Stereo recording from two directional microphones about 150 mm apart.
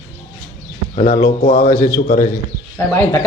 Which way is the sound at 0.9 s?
60° left (ahead or behind).